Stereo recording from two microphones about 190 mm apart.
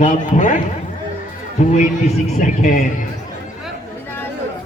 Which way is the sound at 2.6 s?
45° left (ahead or behind).